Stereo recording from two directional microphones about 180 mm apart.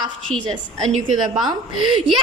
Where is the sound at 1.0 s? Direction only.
25° right (ahead or behind).